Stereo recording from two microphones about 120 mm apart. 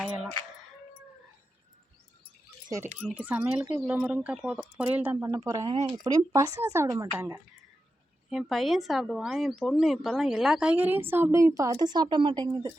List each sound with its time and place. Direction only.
2.6 s speech: 25° right (ahead or behind)
3.1 s speech: 10° right (ahead or behind)
5.2 s speech: 30° right (ahead or behind)
8.3 s speech: centre (ahead or behind); by 12.5 s 35° right (ahead or behind)